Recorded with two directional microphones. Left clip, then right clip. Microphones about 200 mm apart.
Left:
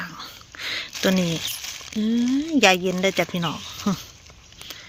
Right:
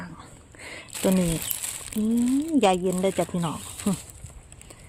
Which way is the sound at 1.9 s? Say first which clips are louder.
Left 1 dB; 10° right (ahead or behind).